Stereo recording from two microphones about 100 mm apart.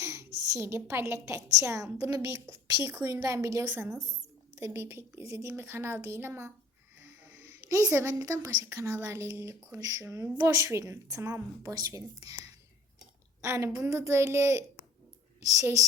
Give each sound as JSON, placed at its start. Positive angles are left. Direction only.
{"t": 0.0, "sound": "a woman's voice", "side_deg": -30}
{"t": 6.9, "sound": "sneeze", "side_deg": -20}
{"t": 7.8, "sound": "a woman's voice", "side_deg": -30}